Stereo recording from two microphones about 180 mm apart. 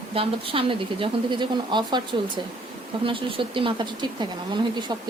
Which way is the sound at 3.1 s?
30° right (ahead or behind).